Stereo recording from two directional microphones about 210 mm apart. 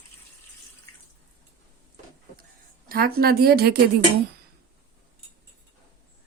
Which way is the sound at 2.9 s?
45° right (ahead or behind).